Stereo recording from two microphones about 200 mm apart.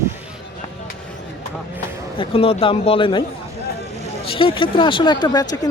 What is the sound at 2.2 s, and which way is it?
Speech, 25° left (ahead or behind).